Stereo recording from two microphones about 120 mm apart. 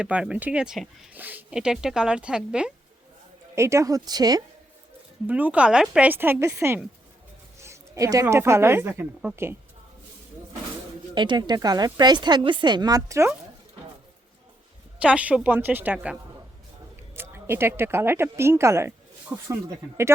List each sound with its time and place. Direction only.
0.0 s speech: 10° right (ahead or behind)
1.1 s speech: 15° right (ahead or behind)
3.5 s a woman's voice: 25° right (ahead or behind)
5.2 s speech: 15° right (ahead or behind)
6.1 s a woman's voice: 15° right (ahead or behind)
11.1 s speech: 40° right (ahead or behind)
15.0 s speech: 10° right (ahead or behind)
17.3 s a woman's voice: 20° right (ahead or behind)